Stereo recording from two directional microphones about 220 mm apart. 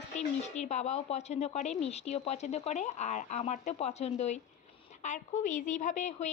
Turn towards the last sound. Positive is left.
turn(degrees=35)  # may be behind; listen again after turning